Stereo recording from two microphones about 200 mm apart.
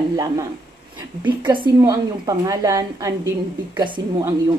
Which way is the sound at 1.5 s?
15° right (ahead or behind).